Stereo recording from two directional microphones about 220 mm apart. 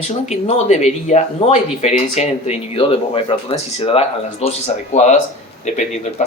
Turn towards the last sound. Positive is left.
turn(degrees=30)  # may be behind; listen again after turning